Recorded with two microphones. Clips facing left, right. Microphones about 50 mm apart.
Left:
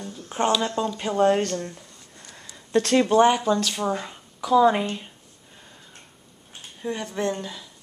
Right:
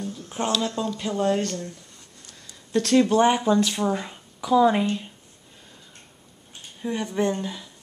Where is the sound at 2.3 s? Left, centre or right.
Left.